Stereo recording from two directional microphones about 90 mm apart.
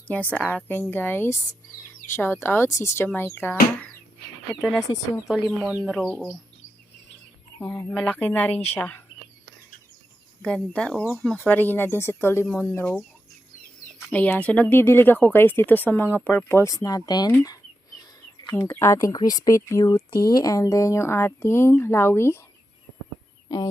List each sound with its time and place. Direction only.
0.1 s a woman's voice: 15° left (ahead or behind)
4.8 s speech: 40° left (ahead or behind)
5.3 s speech: 5° right (ahead or behind)
7.6 s a woman's voice: 25° left (ahead or behind)
7.9 s speech: 5° left (ahead or behind)
8.2 s speech: 15° left (ahead or behind)
10.4 s a woman's voice: 10° left (ahead or behind)
14.1 s a woman's voice: 15° left (ahead or behind)
16.7 s speech: 45° left (ahead or behind)
18.5 s speech: 30° left (ahead or behind)
19.9 s speech: 55° left (ahead or behind); by 22.4 s 30° left (ahead or behind)
23.5 s speech: 40° left (ahead or behind)